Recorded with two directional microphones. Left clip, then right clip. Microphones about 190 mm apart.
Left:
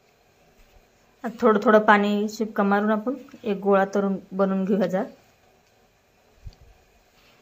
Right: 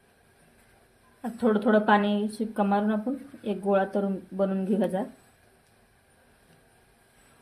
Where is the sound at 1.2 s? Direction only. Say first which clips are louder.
Left 6 dB; 20° left (ahead or behind).